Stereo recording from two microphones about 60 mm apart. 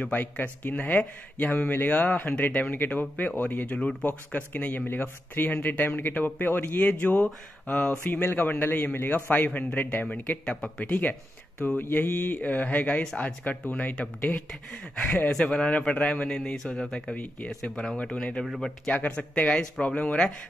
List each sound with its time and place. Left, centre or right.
0.1 s speech: left
7.6 s a sound: left
8.0 s a man's voice: left; by 10.9 s centre
10.9 s speech: left
12.4 s a man's voice: left; by 17.1 s centre
17.1 s speech: left
18.0 s a man's voice: centre
18.4 s speech: centre
18.9 s a man's voice: left